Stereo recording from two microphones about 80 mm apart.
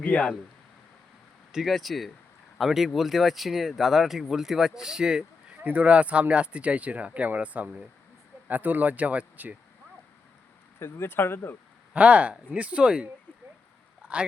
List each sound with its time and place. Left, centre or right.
0.0 s speech: centre
1.5 s speech: centre
10.8 s speech: left
11.9 s speech: centre
14.0 s a sound: centre